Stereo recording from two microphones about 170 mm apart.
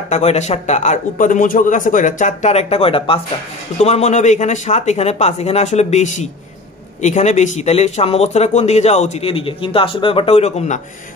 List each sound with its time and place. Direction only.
0.1 s speech: 40° left (ahead or behind)